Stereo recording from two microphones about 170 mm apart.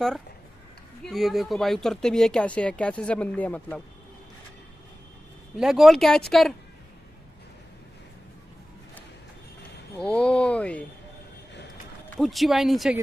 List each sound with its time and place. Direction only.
1.0 s speech: centre (ahead or behind)
5.6 s speech: centre (ahead or behind)
9.9 s speech: 5° left (ahead or behind)
12.2 s speech: centre (ahead or behind)